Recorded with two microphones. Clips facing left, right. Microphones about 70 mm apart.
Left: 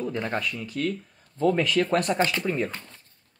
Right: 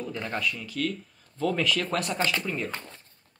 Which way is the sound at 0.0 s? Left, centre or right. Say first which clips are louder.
Left 3 dB; left.